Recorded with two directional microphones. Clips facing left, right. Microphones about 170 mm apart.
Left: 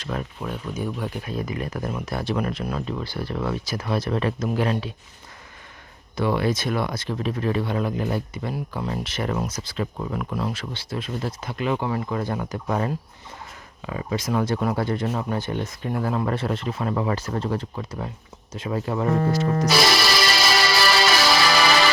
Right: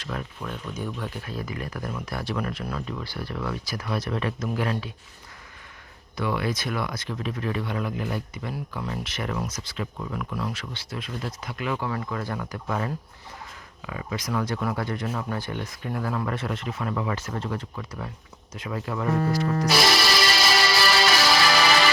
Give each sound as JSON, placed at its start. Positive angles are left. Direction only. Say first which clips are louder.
{"t": 0.0, "sound": "speech", "louder": "left 4 dB", "side_deg": 25}
{"t": 0.7, "sound": "speech", "louder": "left 5 dB", "side_deg": 10}
{"t": 6.1, "sound": "speech", "louder": "left 5 dB", "side_deg": 30}
{"t": 19.8, "sound": "music", "louder": "left 2 dB", "side_deg": 80}